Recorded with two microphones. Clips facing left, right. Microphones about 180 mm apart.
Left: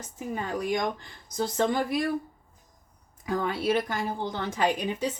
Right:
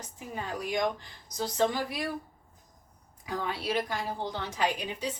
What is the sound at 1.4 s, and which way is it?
Speech, 50° left (ahead or behind).